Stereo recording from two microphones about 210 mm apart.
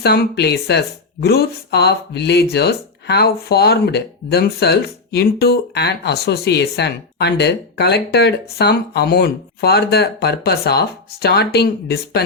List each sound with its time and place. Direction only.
0.0 s speech: 50° left (ahead or behind)